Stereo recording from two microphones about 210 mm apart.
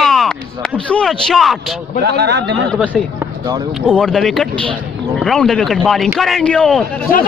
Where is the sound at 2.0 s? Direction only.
50° right (ahead or behind).